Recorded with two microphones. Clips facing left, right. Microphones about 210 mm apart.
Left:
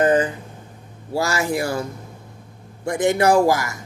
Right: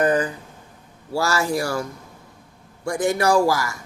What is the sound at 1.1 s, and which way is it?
Speech, 20° left (ahead or behind).